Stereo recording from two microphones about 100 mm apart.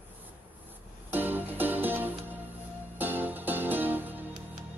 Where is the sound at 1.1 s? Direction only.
20° right (ahead or behind).